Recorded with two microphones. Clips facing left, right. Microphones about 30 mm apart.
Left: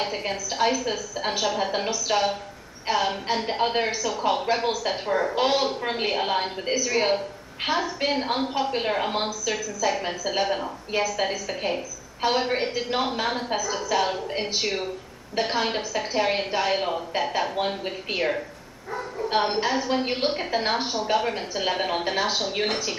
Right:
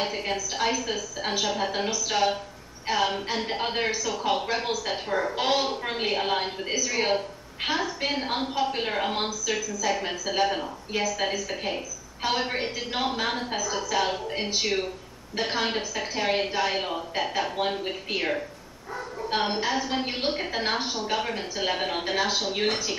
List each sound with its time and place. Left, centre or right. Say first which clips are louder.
0.0 s a woman's voice: even; centre
15.3 s a woman's voice: left 2 dB; centre